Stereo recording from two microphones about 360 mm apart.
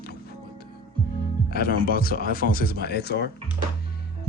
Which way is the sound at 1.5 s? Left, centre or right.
Left.